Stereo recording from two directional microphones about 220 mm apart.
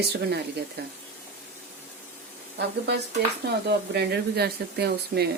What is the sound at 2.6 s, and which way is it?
Speech, 50° right (ahead or behind).